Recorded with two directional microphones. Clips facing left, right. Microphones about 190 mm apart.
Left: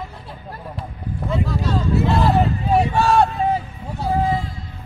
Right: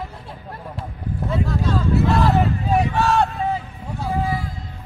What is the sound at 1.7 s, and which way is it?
Speech, 25° left (ahead or behind).